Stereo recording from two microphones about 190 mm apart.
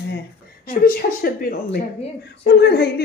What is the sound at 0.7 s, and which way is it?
A woman's voice, 50° left (ahead or behind).